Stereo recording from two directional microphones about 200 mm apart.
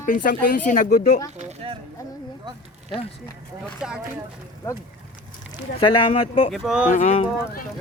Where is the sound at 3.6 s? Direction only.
5° right (ahead or behind).